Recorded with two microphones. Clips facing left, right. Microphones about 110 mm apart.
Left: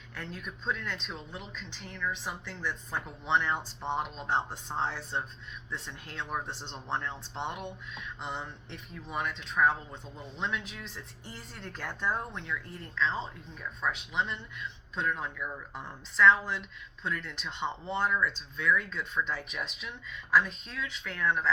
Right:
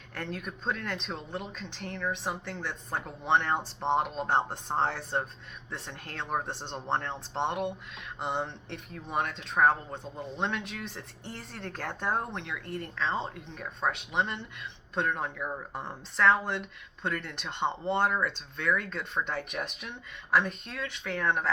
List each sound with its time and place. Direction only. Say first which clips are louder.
0.1 s speech: right 4 dB; 60° right (ahead or behind)
8.7 s speech: right 3 dB; 50° right (ahead or behind)
15.4 s speech: right 3 dB; 35° right (ahead or behind)
16.1 s speech: left 1 dB; 55° right (ahead or behind)